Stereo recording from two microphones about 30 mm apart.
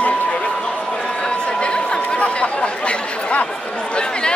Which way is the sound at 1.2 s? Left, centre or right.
Left.